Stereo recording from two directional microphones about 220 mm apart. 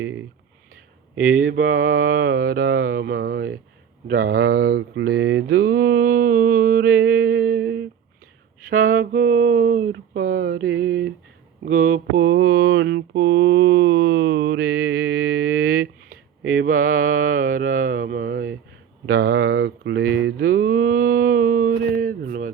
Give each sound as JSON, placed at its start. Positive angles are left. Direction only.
{"t": 0.0, "sound": "speech", "side_deg": -60}
{"t": 1.2, "sound": "mantra", "side_deg": -40}
{"t": 8.6, "sound": "mantra", "side_deg": -40}
{"t": 11.6, "sound": "speech", "side_deg": -40}
{"t": 11.9, "sound": "mantra", "side_deg": -50}